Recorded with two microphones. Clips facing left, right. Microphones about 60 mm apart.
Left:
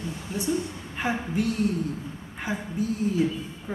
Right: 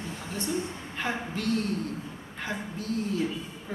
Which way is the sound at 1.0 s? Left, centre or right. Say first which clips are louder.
Left 5 dB; centre.